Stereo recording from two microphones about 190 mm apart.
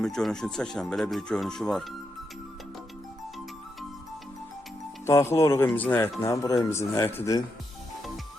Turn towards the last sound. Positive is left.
turn(degrees=15)  # may be behind; listen again after turning